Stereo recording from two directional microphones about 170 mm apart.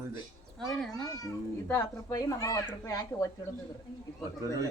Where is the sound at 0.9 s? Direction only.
20° left (ahead or behind).